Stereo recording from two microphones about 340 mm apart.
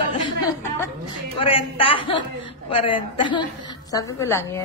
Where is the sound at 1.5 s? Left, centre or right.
Centre.